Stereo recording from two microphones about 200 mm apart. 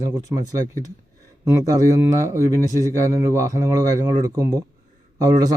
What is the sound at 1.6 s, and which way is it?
A man's voice, 15° right (ahead or behind).